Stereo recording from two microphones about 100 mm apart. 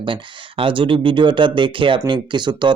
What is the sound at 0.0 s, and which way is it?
Speech, 60° right (ahead or behind).